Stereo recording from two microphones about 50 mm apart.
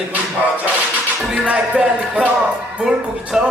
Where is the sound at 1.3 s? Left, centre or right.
Right.